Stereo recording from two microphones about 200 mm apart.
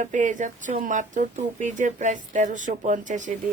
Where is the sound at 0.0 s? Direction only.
40° right (ahead or behind).